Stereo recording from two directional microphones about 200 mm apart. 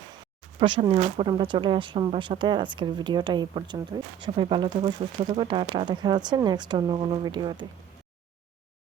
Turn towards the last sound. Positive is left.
turn(degrees=-25)  # may be behind; listen again after turning